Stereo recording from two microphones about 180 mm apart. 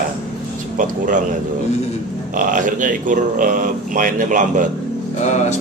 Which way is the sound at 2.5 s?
45° right (ahead or behind).